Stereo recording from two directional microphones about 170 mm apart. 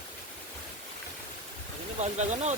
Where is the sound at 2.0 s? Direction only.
40° right (ahead or behind).